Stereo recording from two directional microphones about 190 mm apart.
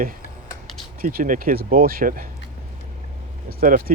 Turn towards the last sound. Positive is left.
turn(degrees=-50)  # may be behind; listen again after turning